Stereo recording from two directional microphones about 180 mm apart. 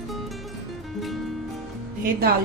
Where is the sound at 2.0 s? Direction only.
55° right (ahead or behind).